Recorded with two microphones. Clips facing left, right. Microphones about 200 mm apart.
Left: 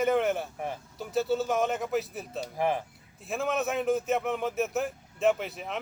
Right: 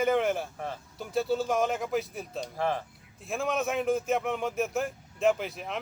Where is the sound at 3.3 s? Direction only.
Centre (ahead or behind).